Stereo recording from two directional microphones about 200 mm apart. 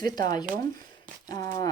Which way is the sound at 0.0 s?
20° left (ahead or behind).